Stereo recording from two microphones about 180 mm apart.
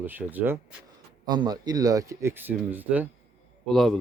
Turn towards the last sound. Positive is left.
turn(degrees=0)  # may be behind; listen again after turning